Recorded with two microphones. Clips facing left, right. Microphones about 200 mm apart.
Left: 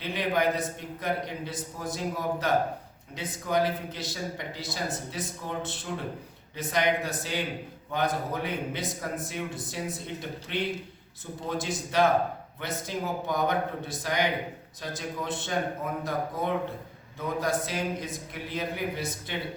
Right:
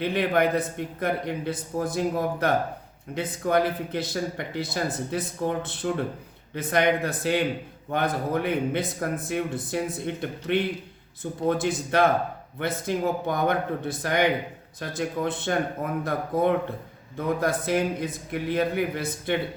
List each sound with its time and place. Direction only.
0.0 s a man's voice: 55° right (ahead or behind)
17.2 s a man's voice: 55° right (ahead or behind)